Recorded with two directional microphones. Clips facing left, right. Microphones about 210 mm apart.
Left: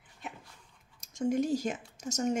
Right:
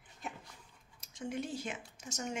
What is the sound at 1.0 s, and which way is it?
Speech, 45° left (ahead or behind).